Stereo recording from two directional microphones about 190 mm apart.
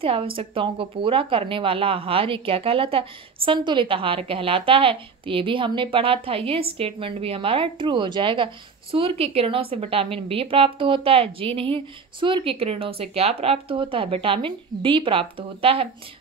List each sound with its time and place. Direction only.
0.0 s speech: 30° right (ahead or behind)